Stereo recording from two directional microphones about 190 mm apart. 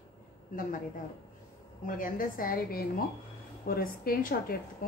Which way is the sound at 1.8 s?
45° left (ahead or behind).